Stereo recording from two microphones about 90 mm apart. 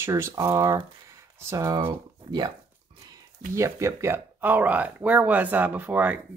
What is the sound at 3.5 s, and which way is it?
Speech, 35° right (ahead or behind).